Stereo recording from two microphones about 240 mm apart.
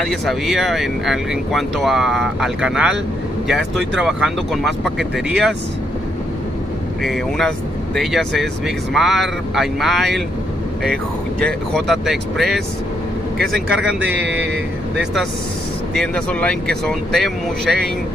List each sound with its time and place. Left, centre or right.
0.0 s speech: centre
7.0 s speech: centre
11.4 s speech: centre
14.1 s speech: right
15.9 s speech: centre